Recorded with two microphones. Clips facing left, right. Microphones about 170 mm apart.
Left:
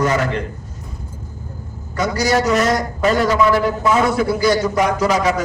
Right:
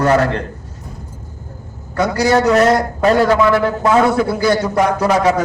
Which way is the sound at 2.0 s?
60° right (ahead or behind).